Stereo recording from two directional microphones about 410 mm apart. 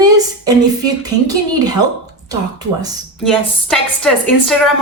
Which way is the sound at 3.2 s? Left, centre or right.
Centre.